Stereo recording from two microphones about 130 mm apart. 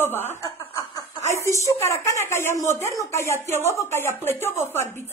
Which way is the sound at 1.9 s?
20° left (ahead or behind).